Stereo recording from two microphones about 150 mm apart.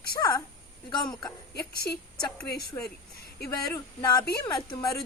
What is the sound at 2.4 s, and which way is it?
Speech, 90° left.